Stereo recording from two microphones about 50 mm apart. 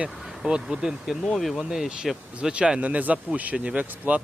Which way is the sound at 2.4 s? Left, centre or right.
Centre.